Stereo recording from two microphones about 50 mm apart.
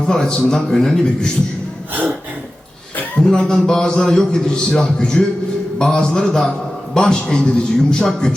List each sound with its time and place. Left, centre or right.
0.1 s a man's voice: centre
1.9 s gasp: right
3.2 s a man's voice: left